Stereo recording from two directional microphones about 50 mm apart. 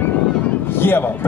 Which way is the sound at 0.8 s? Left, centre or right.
Left.